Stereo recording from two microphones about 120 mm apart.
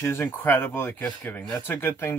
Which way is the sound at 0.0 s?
20° left (ahead or behind).